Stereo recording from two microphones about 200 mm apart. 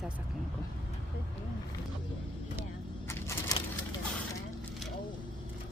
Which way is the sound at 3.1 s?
15° left (ahead or behind).